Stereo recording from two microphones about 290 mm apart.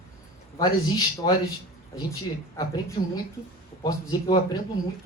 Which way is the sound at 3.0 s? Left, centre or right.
Left.